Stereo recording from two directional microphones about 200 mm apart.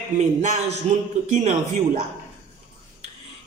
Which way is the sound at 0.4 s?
35° right (ahead or behind).